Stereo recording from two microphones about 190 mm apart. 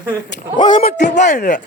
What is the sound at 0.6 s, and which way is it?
Speech, 25° left (ahead or behind).